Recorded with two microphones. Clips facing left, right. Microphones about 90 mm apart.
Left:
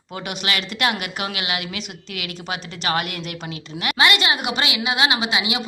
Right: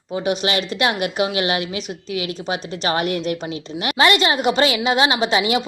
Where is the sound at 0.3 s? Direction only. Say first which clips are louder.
Right 6 dB; 30° right (ahead or behind).